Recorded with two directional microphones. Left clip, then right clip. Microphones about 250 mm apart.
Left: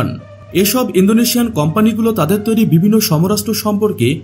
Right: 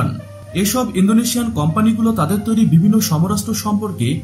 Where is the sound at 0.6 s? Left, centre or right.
Left.